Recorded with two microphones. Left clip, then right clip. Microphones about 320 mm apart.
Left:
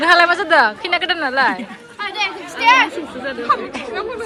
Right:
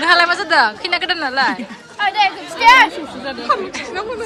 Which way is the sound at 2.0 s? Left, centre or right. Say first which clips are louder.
Right 6 dB; right.